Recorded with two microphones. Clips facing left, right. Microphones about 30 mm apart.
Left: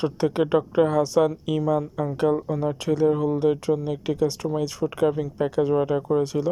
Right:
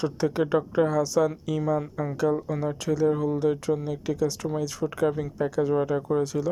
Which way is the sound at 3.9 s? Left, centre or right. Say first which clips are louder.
Left 3 dB; left.